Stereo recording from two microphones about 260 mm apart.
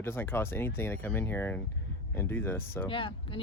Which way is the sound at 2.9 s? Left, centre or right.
Centre.